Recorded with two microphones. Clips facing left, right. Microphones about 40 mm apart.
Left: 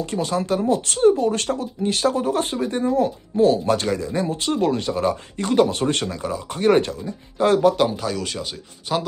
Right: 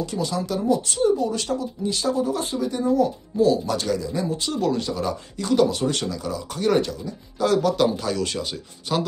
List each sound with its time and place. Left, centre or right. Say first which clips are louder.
0.0 s speech: left 3 dB; left
7.8 s speech: even; centre